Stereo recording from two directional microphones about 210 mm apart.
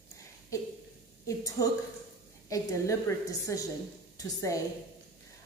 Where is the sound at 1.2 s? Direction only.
15° left (ahead or behind).